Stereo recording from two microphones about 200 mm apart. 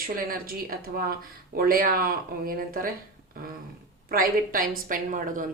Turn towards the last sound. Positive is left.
turn(degrees=-40)  # may be behind; listen again after turning